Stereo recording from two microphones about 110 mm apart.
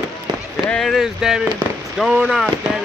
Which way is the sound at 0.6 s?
5° left (ahead or behind).